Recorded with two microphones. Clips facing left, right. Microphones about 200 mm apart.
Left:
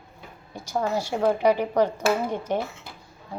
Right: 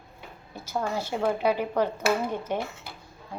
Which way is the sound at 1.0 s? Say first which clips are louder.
Left 4 dB; 15° left (ahead or behind).